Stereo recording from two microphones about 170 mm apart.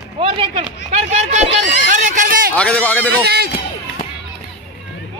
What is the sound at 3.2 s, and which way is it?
Speech, 70° right (ahead or behind).